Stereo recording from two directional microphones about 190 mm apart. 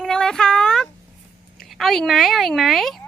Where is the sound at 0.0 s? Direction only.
5° left (ahead or behind).